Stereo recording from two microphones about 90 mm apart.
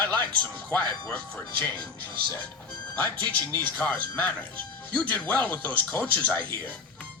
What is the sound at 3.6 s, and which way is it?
Speech, 15° left (ahead or behind).